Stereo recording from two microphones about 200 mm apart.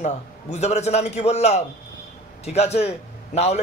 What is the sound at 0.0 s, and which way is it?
A man's voice, 35° left (ahead or behind).